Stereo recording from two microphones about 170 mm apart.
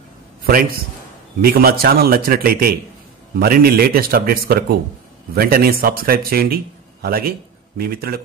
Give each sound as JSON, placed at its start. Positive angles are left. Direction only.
{"t": 0.5, "sound": "a man's voice", "side_deg": -60}